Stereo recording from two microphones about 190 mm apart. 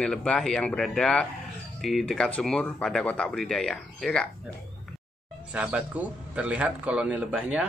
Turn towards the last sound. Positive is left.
turn(degrees=-5)  # may be behind; listen again after turning